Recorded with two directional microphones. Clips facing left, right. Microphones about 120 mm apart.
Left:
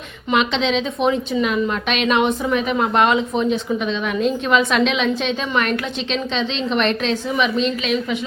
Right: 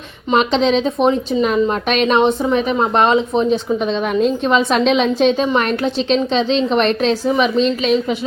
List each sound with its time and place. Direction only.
0.3 s a woman's voice: 40° right (ahead or behind)